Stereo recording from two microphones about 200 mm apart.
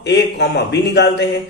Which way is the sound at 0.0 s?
60° left (ahead or behind).